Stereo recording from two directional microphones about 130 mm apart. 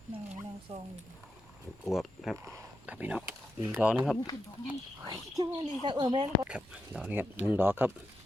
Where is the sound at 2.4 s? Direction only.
25° right (ahead or behind).